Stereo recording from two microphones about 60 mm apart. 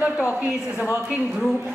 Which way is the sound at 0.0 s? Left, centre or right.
Right.